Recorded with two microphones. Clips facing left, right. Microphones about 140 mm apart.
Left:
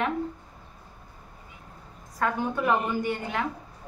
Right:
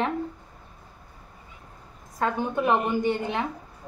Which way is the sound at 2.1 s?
20° right (ahead or behind).